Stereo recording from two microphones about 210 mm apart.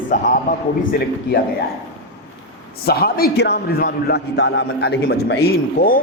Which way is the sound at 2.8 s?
45° left (ahead or behind).